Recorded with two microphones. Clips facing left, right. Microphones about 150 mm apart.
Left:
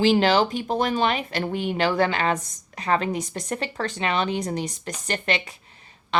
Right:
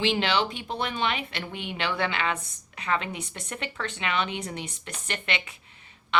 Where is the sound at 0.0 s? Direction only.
40° left (ahead or behind).